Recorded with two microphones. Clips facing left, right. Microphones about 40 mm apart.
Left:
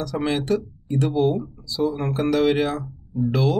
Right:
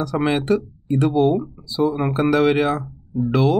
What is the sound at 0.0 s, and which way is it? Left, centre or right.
Speech, right.